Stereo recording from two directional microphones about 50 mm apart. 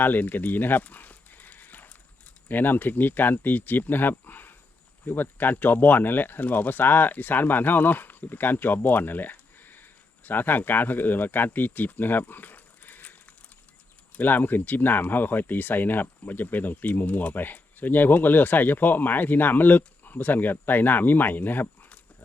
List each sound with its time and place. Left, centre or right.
0.0 s a sound: left
2.5 s speech: left
14.2 s speech: left